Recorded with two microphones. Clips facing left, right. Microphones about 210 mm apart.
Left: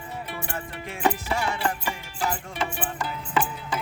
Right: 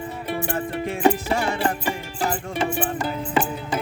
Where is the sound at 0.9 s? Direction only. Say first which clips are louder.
Right 5 dB; 30° right (ahead or behind).